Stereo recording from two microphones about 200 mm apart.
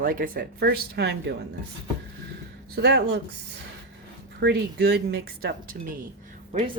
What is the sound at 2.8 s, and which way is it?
Speech, 60° right (ahead or behind).